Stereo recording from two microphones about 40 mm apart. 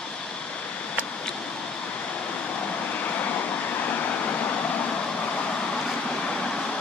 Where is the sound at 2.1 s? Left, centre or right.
Left.